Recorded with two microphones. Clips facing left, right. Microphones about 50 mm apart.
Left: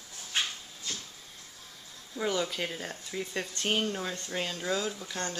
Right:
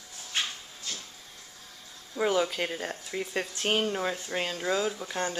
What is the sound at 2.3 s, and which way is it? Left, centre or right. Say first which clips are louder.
Speech: right 4 dB; centre.